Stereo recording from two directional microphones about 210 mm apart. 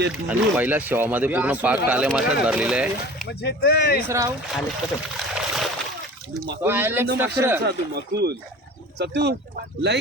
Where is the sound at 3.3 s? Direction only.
55° left (ahead or behind).